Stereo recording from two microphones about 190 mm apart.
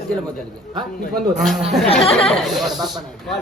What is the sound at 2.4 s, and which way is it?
Speech, centre (ahead or behind).